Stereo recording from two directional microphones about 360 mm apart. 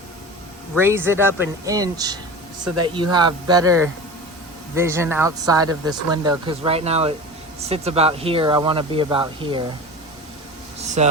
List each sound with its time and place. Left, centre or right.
0.8 s speech: centre
10.8 s speech: centre